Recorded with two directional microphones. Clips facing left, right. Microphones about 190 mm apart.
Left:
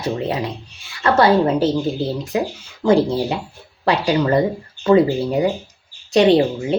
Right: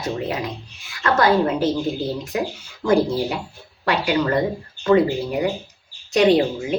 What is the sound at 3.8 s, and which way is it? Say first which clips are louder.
Speech: left 3 dB; 30° left (ahead or behind).